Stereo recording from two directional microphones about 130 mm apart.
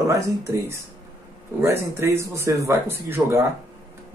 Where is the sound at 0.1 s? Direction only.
20° right (ahead or behind).